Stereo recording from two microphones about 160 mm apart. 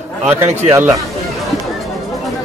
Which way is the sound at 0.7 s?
15° right (ahead or behind).